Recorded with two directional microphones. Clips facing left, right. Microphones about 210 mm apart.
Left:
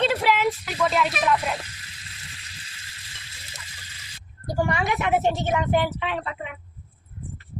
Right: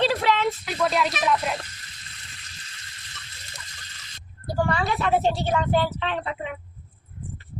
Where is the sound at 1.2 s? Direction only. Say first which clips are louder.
Even; centre (ahead or behind).